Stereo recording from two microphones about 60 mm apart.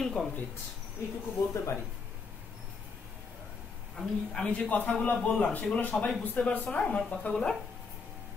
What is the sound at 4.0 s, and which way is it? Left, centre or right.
A woman's voice, centre.